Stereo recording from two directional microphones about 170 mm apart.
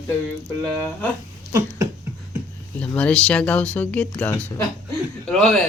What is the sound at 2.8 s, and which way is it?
A man's voice, 5° left (ahead or behind).